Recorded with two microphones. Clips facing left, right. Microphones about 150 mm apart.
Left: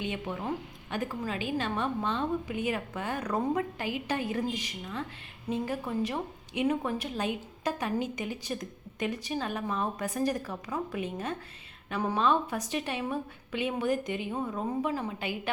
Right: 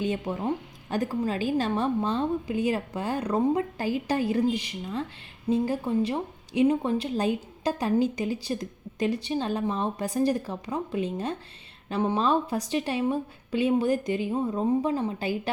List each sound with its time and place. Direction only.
0.0 s a woman's voice: 35° right (ahead or behind)